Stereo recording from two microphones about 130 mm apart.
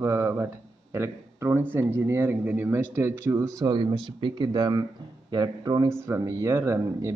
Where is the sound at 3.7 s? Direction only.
40° right (ahead or behind).